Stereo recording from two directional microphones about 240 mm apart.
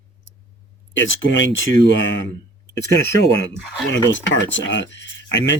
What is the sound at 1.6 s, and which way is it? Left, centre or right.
Speech, left.